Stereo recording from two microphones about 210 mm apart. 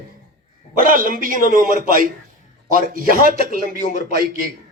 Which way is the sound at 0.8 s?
40° right (ahead or behind).